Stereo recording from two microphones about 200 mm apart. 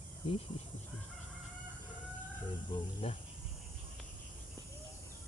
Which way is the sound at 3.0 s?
30° left (ahead or behind).